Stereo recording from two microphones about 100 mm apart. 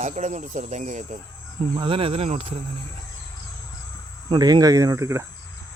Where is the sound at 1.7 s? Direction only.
60° right (ahead or behind); by 2.5 s 85° right.